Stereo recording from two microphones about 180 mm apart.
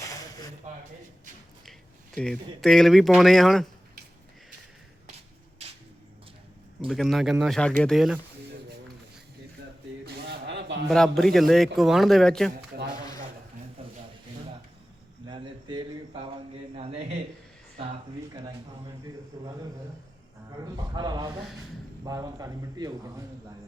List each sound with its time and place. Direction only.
0.7 s speech: 40° right (ahead or behind)
2.1 s a man's voice: 5° left (ahead or behind)
6.8 s a man's voice: centre (ahead or behind)
10.1 s a sound: 65° right (ahead or behind); by 10.8 s 80° right
10.8 s a man's voice: centre (ahead or behind)
15.3 s a sound: 25° right (ahead or behind)
20.9 s a man's voice: 25° right (ahead or behind)